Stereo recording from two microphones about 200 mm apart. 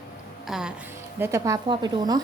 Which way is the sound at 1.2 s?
15° right (ahead or behind).